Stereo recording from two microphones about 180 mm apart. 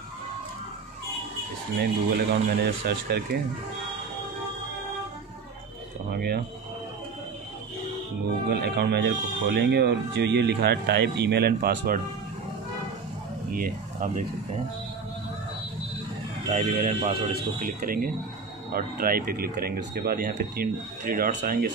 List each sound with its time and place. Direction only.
1.8 s speech: 60° right (ahead or behind)
6.1 s speech: 60° right (ahead or behind)
8.5 s speech: 60° right (ahead or behind)
13.5 s speech: 50° right (ahead or behind)
16.4 s speech: 45° right (ahead or behind); by 21.7 s 60° right (ahead or behind)